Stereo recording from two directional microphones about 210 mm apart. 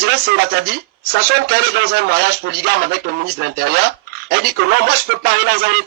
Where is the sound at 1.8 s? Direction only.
50° right (ahead or behind).